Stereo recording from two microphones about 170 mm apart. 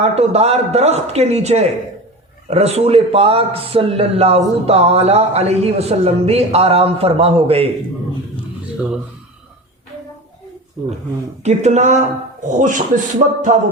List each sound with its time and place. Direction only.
0.0 s speech: 40° right (ahead or behind)
11.4 s speech: 40° right (ahead or behind)